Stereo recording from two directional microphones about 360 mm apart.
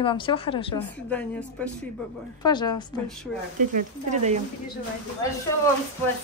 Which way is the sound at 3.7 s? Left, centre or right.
Centre.